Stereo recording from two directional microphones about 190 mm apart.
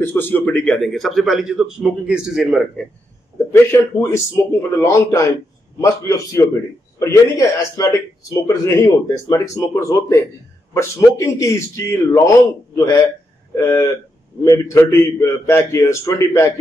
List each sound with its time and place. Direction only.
0.0 s a man's voice: 10° left (ahead or behind)
4.1 s a man's voice: 15° left (ahead or behind)